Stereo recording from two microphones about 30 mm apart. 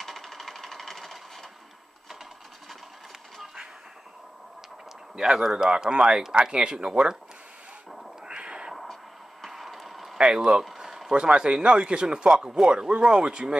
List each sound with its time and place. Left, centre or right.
0.0 s sewing machine: centre
5.1 s speech: centre
8.3 s a sound: right
9.5 s a sound: centre
10.2 s speech: right
11.1 s speech: right
13.2 s speech: right